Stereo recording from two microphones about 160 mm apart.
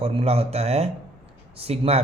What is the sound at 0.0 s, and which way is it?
Speech, 35° right (ahead or behind).